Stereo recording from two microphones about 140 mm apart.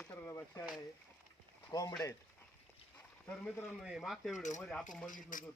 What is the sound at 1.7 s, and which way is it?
Speech, 25° left (ahead or behind).